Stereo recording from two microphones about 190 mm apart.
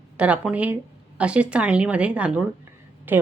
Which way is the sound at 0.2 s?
5° right (ahead or behind).